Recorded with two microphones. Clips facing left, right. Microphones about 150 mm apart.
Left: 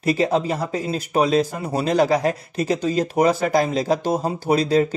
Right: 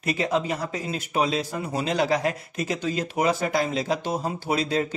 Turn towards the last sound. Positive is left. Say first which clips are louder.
# left 7 dB
turn(degrees=40)  # may be behind; listen again after turning